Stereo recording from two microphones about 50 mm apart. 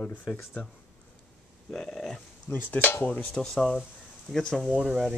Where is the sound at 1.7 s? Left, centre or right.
Centre.